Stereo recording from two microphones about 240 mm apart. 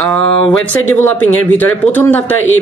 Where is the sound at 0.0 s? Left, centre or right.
Centre.